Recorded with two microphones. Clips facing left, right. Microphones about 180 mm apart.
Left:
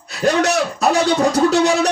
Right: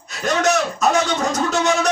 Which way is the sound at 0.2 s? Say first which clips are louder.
Left 2 dB; 35° left (ahead or behind).